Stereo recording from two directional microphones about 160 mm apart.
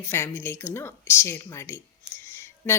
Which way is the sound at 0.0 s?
15° left (ahead or behind).